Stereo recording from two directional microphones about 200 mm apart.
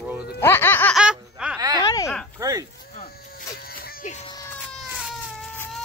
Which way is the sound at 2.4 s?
15° right (ahead or behind).